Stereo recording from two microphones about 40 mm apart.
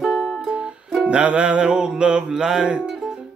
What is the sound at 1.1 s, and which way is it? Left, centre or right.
Speech, right.